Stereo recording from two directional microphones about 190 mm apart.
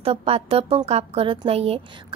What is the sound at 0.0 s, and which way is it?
A woman's voice, 30° right (ahead or behind).